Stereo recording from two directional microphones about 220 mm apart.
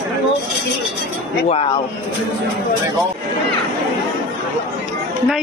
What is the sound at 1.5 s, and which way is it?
Speech, 25° left (ahead or behind).